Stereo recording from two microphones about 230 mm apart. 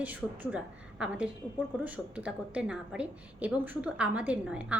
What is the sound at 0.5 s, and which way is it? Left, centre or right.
A woman's voice, centre.